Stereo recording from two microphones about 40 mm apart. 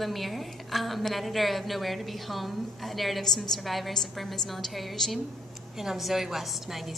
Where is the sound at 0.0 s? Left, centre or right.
Centre.